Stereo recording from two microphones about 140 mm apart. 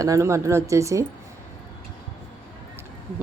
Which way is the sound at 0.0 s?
20° right (ahead or behind).